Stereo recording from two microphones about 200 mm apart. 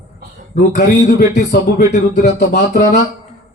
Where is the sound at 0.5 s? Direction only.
50° left (ahead or behind).